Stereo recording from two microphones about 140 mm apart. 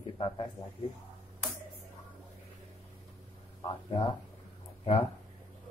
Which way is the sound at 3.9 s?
30° left (ahead or behind).